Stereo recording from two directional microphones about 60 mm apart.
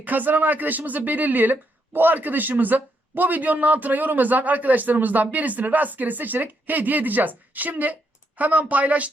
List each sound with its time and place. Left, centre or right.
0.0 s speech: right